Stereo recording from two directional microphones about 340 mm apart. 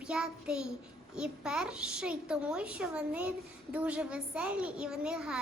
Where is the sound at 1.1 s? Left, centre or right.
Centre.